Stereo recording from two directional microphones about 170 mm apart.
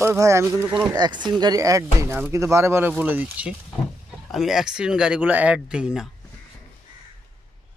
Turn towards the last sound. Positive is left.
turn(degrees=-5)  # may be behind; listen again after turning